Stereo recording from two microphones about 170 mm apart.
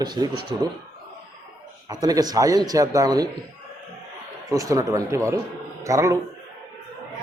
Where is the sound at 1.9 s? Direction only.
20° right (ahead or behind).